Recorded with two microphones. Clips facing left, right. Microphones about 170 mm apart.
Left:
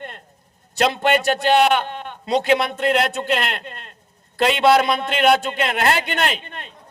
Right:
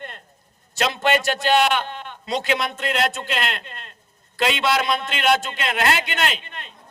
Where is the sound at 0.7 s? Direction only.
55° left (ahead or behind).